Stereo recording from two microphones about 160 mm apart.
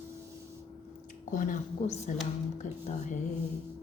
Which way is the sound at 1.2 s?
55° left (ahead or behind).